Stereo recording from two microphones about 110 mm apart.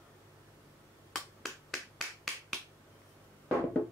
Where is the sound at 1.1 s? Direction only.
Centre (ahead or behind).